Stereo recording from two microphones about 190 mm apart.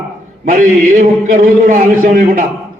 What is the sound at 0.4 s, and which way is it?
A man's voice, 50° right (ahead or behind).